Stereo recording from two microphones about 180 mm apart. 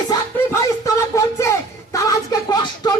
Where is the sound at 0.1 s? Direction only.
15° left (ahead or behind).